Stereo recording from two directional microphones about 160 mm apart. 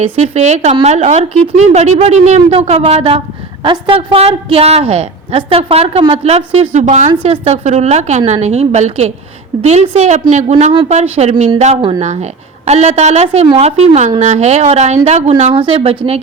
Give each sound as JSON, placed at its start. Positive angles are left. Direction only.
{"t": 0.0, "sound": "a woman's voice", "side_deg": -45}
{"t": 15.5, "sound": "a woman's voice", "side_deg": -35}